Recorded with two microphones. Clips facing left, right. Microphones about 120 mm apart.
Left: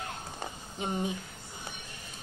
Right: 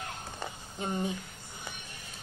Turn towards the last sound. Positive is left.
turn(degrees=20)  # may be behind; listen again after turning